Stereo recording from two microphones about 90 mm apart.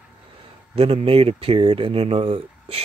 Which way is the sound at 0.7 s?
90° right.